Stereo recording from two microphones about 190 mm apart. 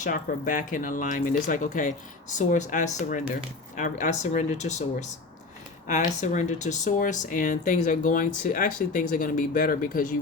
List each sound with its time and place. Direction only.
0.0 s speech: 45° left (ahead or behind)